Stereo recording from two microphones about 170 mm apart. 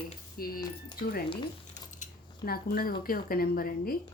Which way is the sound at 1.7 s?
45° left (ahead or behind).